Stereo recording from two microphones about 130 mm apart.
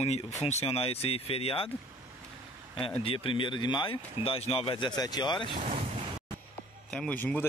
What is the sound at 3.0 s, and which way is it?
Speech, 45° left (ahead or behind).